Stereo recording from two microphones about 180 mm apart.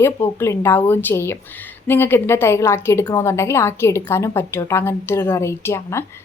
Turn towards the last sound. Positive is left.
turn(degrees=15)  # may be behind; listen again after turning